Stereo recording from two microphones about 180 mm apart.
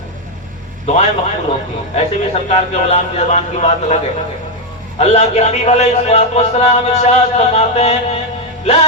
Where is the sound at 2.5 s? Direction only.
40° left (ahead or behind).